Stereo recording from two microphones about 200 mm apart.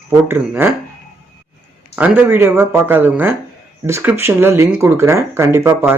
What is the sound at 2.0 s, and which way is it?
Speech, 10° right (ahead or behind).